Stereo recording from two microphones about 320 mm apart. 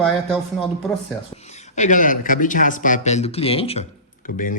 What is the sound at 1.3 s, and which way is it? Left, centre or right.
Speech, left.